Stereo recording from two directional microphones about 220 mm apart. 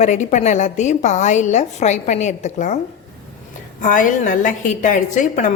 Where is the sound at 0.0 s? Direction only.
30° left (ahead or behind).